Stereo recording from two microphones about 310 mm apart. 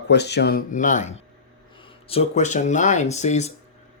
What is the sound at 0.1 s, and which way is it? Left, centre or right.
Speech, left.